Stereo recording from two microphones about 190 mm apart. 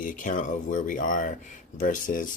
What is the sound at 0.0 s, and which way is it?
Speech, 45° left (ahead or behind).